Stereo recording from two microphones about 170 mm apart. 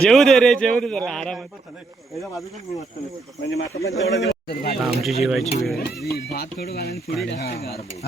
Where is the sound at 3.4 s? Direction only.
85° left; by 4.8 s 70° left (ahead or behind).